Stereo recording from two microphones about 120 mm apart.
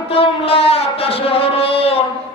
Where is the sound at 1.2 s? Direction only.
55° left (ahead or behind).